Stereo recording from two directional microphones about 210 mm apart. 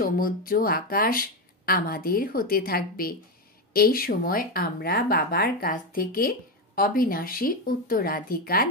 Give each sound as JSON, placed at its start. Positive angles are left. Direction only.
{"t": 0.0, "sound": "speech", "side_deg": 45}